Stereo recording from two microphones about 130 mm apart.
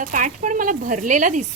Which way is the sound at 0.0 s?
85° right.